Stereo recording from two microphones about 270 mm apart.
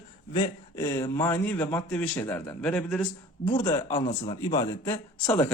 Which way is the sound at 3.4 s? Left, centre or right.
Centre.